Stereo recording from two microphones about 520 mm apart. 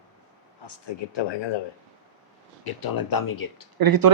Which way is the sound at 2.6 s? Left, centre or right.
Left.